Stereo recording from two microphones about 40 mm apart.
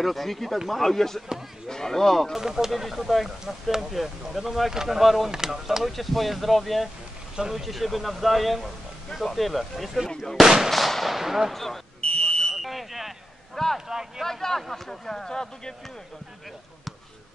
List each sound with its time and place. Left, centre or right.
0.0 s speech: centre
2.3 s speech: centre
5.9 s speech: centre
7.3 s speech: centre
7.6 s speech: centre
10.4 s speech: centre
10.7 s speech: centre
11.5 s speech: centre
12.0 s smoke detector: left
12.6 s a sound: centre
13.7 s speech: centre
14.2 s speech: centre